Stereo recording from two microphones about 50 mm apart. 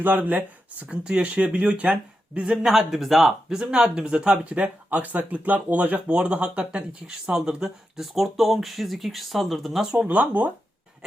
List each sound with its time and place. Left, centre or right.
0.0 s speech: right; by 2.7 s centre
2.7 s speech: centre
3.6 s speech: centre
10.1 s speech: right